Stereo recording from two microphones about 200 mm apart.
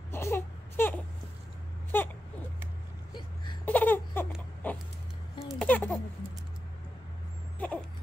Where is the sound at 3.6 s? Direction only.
10° left (ahead or behind).